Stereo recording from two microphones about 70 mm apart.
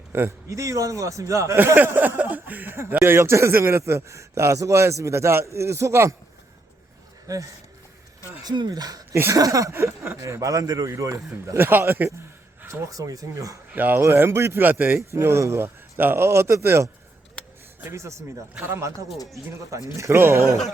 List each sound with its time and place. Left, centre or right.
0.1 s speech: right
0.5 s speech: right
1.5 s a man's voice: right
7.3 s speech: right
8.4 s speech: right
9.3 s speech: right
9.7 s speech: right
11.5 s a man's voice: right
13.7 s speech: right
14.0 s a man's voice: right
15.1 s a man's voice: right
18.6 s a man's voice: right